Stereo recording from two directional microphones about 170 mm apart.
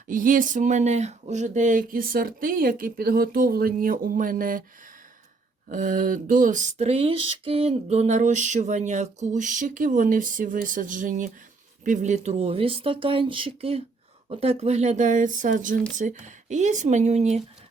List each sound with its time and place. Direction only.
0.1 s speech: 55° right (ahead or behind)
5.6 s speech: 50° right (ahead or behind)